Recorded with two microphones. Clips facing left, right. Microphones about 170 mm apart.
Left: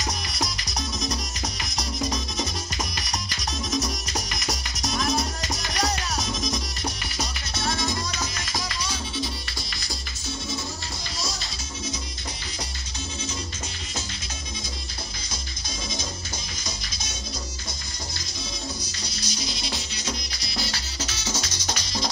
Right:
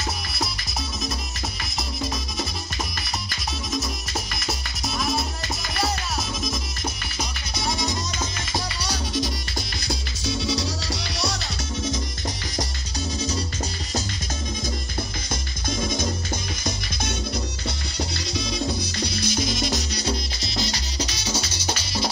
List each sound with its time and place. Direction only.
0.0 s music: centre (ahead or behind)
3.7 s music: centre (ahead or behind)
7.2 s music: 15° right (ahead or behind)
8.9 s music: 40° right (ahead or behind)
9.8 s music: 80° right
18.9 s music: 60° right (ahead or behind); by 20.2 s 35° right (ahead or behind)
20.3 s music: 25° right (ahead or behind)